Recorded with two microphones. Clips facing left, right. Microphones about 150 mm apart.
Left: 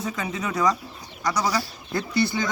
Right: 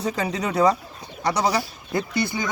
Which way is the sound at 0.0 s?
35° right (ahead or behind).